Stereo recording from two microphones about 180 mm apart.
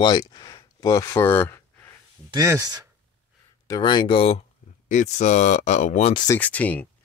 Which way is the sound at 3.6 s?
20° left (ahead or behind).